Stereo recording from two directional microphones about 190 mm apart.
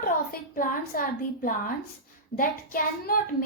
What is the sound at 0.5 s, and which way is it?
A woman's voice, 45° left (ahead or behind).